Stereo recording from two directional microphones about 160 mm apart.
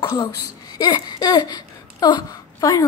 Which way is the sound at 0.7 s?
25° left (ahead or behind).